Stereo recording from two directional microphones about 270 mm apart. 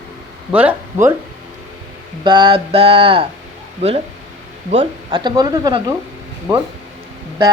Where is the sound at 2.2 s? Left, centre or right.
Centre.